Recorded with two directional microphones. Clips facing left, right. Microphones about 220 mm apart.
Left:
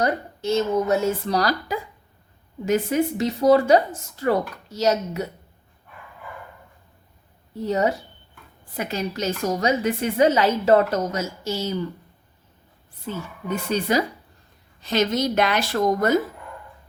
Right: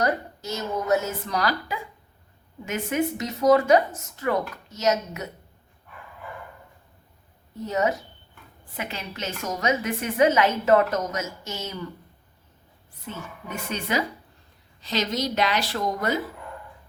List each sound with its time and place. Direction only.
0.0 s a woman's voice: 25° left (ahead or behind)
7.6 s a woman's voice: 30° left (ahead or behind)
13.1 s a woman's voice: 35° left (ahead or behind)
14.8 s a woman's voice: 50° left (ahead or behind)